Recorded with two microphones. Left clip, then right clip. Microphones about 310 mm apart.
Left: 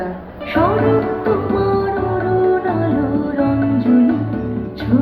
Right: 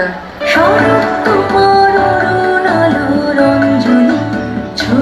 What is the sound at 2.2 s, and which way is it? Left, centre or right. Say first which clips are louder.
Music: right 5 dB; right.